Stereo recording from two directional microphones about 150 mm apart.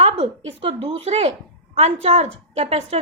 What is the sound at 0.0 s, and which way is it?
A woman's voice, 45° right (ahead or behind).